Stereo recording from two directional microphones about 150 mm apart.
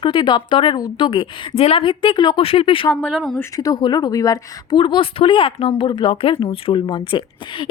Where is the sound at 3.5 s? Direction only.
25° left (ahead or behind).